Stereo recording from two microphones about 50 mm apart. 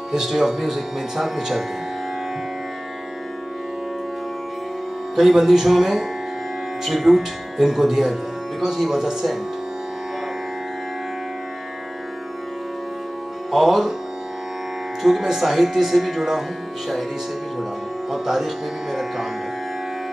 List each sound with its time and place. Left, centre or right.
0.1 s speech: centre
5.1 s speech: centre
13.5 s speech: centre
15.0 s speech: centre
18.1 s speech: centre